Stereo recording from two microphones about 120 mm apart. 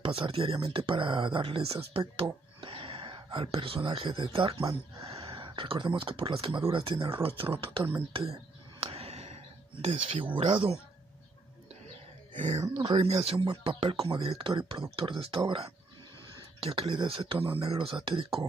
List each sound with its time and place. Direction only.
0.0 s speech: 45° right (ahead or behind)
8.1 s a sound: 50° right (ahead or behind)
10.5 s speech: 45° right (ahead or behind)
12.4 s speech: 75° right (ahead or behind)
12.6 s speech: 40° right (ahead or behind)
13.0 s speech: 55° right (ahead or behind)